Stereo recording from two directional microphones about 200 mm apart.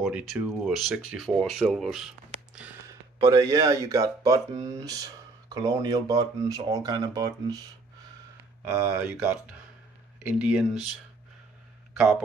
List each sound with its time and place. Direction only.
0.0 s speech: centre (ahead or behind)
3.2 s speech: 15° right (ahead or behind)
8.6 s speech: 5° right (ahead or behind)